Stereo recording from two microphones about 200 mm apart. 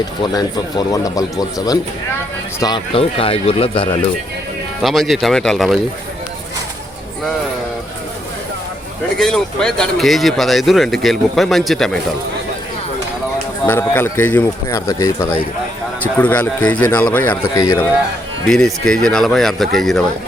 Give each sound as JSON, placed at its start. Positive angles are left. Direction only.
{"t": 0.2, "sound": "speech", "side_deg": 20}
{"t": 4.8, "sound": "speech", "side_deg": 0}
{"t": 9.1, "sound": "speech", "side_deg": 0}
{"t": 13.7, "sound": "speech", "side_deg": 10}
{"t": 18.4, "sound": "speech", "side_deg": 0}